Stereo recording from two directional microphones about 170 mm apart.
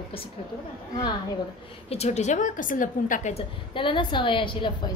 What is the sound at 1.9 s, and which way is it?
A woman's voice, 40° left (ahead or behind).